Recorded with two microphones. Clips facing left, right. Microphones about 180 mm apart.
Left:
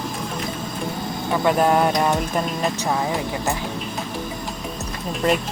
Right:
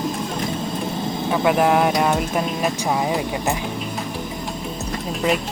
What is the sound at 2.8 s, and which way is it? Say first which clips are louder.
Speech: right 2 dB; 15° right (ahead or behind).